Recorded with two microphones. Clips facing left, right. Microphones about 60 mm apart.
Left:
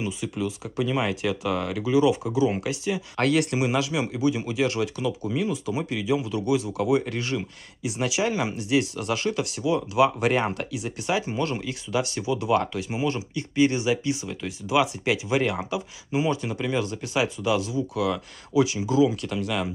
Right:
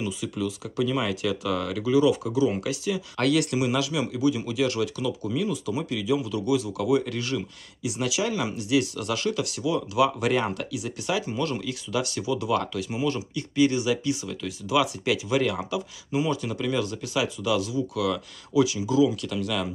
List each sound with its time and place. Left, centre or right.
0.0 s speech: left